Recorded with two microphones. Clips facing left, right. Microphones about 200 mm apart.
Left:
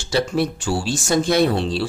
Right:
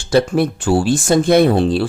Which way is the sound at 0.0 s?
55° right (ahead or behind).